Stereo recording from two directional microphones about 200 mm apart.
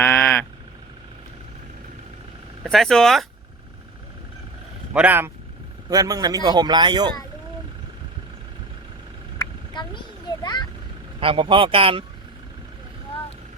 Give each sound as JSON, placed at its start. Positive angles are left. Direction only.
{"t": 0.0, "sound": "a sound", "side_deg": 10}
{"t": 2.6, "sound": "speech", "side_deg": 0}
{"t": 4.9, "sound": "a man's voice", "side_deg": -10}
{"t": 9.4, "sound": "a sound", "side_deg": 25}
{"t": 10.4, "sound": "vehicle", "side_deg": 20}
{"t": 11.2, "sound": "a man's voice", "side_deg": -25}